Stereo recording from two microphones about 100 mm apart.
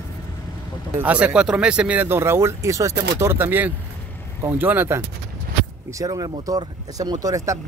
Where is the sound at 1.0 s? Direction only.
15° right (ahead or behind).